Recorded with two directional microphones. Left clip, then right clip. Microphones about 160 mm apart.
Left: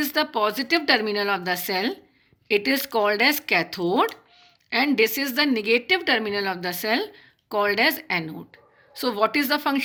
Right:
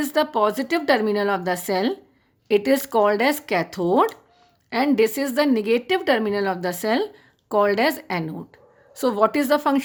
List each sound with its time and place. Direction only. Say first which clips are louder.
0.0 s speech: right 3 dB; 30° right (ahead or behind)